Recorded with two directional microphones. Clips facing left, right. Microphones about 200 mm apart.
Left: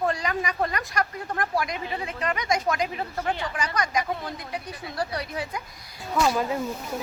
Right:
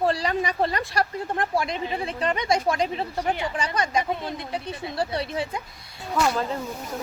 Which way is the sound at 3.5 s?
25° right (ahead or behind).